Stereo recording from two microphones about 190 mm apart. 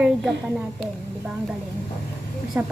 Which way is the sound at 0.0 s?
Centre (ahead or behind).